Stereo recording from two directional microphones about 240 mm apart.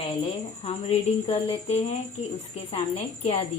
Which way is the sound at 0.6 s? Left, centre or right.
Left.